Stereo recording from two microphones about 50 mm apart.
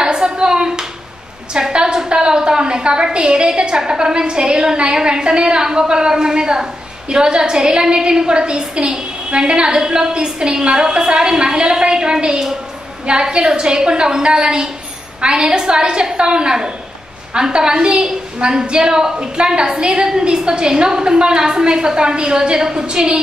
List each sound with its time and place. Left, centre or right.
0.0 s clapping: centre
1.5 s a woman's voice: centre